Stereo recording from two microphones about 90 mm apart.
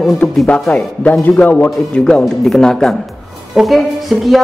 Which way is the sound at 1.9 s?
10° left (ahead or behind).